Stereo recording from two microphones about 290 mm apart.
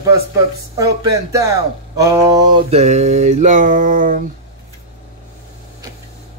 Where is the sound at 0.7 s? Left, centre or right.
Centre.